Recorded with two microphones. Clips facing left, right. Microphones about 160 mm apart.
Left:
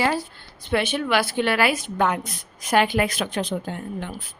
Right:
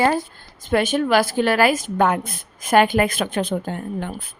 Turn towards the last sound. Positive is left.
turn(degrees=-50)  # may be behind; listen again after turning